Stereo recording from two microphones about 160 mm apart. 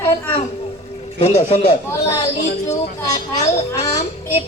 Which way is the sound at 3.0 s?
25° left (ahead or behind).